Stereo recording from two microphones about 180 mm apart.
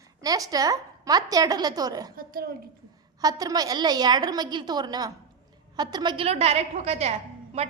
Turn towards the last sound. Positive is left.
turn(degrees=-35)  # may be behind; listen again after turning